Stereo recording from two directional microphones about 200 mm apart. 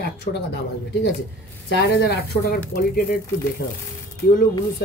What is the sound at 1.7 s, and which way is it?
Speech, 55° left (ahead or behind).